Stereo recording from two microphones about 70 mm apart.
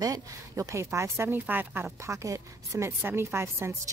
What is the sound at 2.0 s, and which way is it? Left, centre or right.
A woman's voice, right.